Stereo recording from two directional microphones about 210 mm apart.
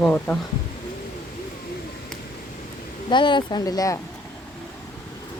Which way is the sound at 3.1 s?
20° left (ahead or behind).